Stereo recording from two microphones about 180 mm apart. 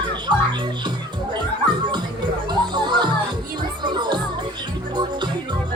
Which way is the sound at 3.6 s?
25° right (ahead or behind).